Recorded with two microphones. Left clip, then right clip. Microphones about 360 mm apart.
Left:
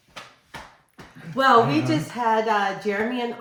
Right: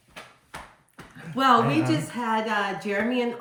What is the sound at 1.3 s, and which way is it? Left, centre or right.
A woman's voice, centre.